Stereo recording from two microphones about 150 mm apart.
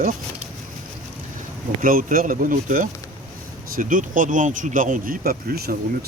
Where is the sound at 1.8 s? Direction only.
70° right (ahead or behind).